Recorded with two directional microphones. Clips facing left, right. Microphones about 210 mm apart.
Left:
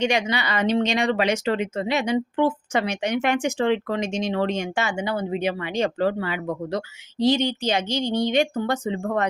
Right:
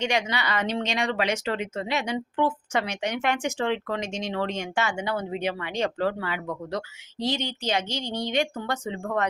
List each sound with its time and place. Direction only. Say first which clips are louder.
0.0 s speech: left 4 dB; 15° left (ahead or behind)